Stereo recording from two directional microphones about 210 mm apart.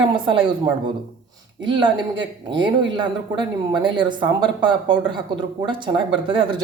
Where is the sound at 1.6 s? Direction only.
20° right (ahead or behind).